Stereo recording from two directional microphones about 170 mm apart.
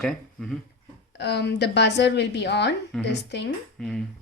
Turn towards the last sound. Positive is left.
turn(degrees=0)  # may be behind; listen again after turning